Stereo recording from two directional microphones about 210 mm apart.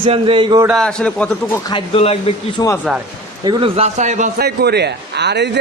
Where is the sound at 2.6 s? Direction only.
15° left (ahead or behind).